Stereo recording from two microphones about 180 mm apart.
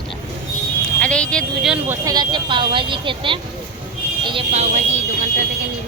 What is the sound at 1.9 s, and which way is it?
Speech, 20° right (ahead or behind).